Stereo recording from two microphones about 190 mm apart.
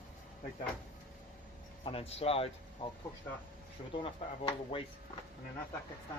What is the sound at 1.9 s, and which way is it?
Speech, 30° left (ahead or behind).